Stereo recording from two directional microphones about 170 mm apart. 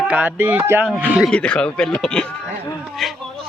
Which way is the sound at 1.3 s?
5° left (ahead or behind).